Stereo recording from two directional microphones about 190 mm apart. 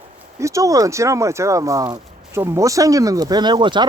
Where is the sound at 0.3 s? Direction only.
15° right (ahead or behind).